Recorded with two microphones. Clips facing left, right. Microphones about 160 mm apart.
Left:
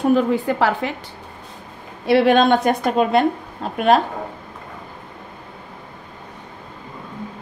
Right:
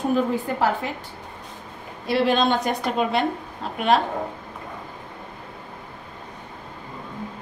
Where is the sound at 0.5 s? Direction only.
90° left.